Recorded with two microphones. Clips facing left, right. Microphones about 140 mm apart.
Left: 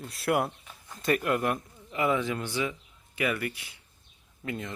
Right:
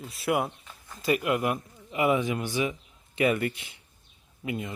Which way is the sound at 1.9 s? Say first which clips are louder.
Right 2 dB; 15° right (ahead or behind).